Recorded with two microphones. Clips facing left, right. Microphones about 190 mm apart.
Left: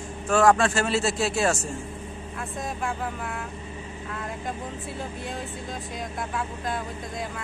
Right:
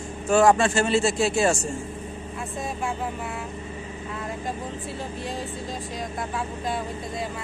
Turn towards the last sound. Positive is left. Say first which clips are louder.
# right 1 dB
turn(degrees=0)  # may be behind; listen again after turning